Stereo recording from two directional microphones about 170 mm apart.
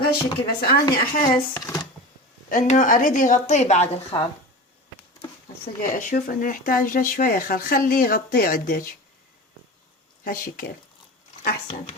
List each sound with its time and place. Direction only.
0.1 s speech: 65° left (ahead or behind)
1.5 s speech: 20° left (ahead or behind)
2.5 s a woman's voice: 45° left (ahead or behind)
4.1 s speech: 30° left (ahead or behind)
5.6 s speech: 50° left (ahead or behind)
10.2 s speech: 55° left (ahead or behind)